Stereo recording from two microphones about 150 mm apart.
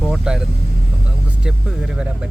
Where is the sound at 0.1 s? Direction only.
5° right (ahead or behind).